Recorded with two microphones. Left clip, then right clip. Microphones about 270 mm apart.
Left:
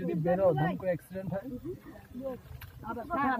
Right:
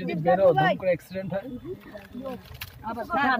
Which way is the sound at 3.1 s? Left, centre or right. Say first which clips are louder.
Right 7 dB; right.